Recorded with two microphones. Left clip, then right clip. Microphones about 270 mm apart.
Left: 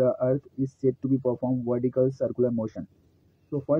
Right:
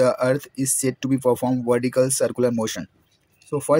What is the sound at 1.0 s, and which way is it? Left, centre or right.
Speech, right.